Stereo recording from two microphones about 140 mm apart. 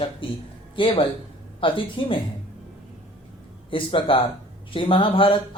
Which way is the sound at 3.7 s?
40° left (ahead or behind).